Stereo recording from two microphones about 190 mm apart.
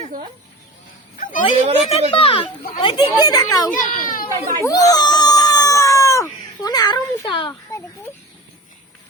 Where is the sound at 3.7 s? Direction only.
45° left (ahead or behind).